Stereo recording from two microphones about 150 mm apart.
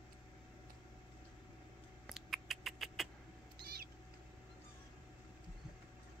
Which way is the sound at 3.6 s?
90° right.